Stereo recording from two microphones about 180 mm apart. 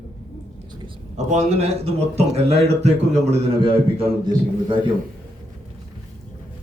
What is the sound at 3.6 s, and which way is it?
A man's voice, 30° right (ahead or behind).